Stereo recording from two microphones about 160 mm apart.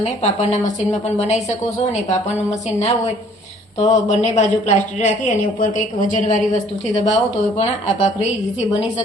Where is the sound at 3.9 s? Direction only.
45° left (ahead or behind).